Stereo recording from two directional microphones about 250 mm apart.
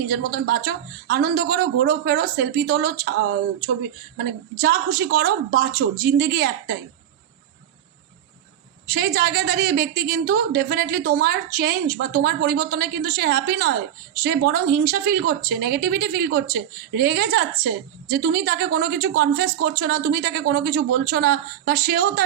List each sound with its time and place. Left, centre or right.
0.1 s a woman's voice: right
8.9 s a woman's voice: right